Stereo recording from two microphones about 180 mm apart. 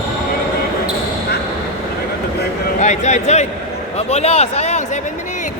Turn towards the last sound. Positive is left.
turn(degrees=35)  # may be behind; listen again after turning